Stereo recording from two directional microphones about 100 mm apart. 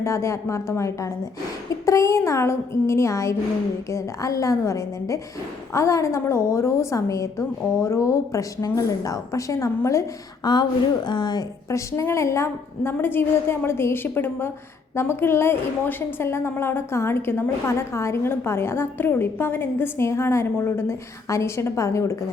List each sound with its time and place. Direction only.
0.0 s a woman's voice: 30° left (ahead or behind)
10.4 s a woman's voice: 45° left (ahead or behind); by 22.2 s 30° left (ahead or behind)